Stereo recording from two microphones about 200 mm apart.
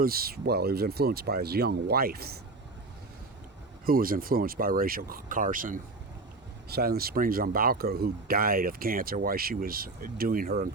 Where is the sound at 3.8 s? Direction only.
45° right (ahead or behind).